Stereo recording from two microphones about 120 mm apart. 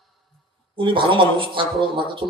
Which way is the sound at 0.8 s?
45° right (ahead or behind).